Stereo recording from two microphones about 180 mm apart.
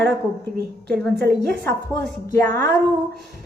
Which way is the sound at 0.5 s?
60° right (ahead or behind).